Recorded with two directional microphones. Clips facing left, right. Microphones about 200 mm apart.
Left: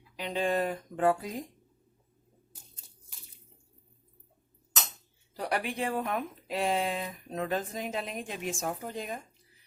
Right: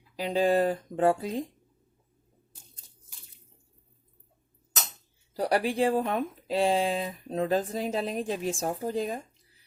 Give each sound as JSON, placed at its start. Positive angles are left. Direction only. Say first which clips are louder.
{"t": 0.2, "sound": "speech", "louder": "right 5 dB", "side_deg": -35}
{"t": 5.4, "sound": "speech", "louder": "right 7 dB", "side_deg": -35}